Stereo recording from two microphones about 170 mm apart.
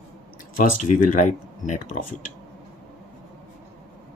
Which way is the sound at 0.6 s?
50° left (ahead or behind).